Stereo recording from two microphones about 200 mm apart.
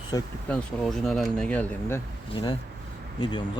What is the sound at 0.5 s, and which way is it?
Speech, centre (ahead or behind).